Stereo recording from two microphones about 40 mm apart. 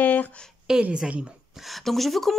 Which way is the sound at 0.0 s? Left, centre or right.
Left.